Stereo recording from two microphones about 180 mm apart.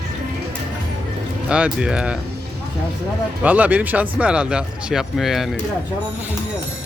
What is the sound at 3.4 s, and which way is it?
Speech, 10° right (ahead or behind).